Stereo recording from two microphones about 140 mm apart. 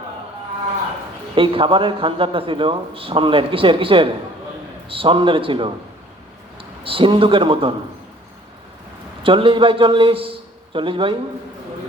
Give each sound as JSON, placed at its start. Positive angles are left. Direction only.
{"t": 1.4, "sound": "a man's voice", "side_deg": -40}
{"t": 9.2, "sound": "a man's voice", "side_deg": -40}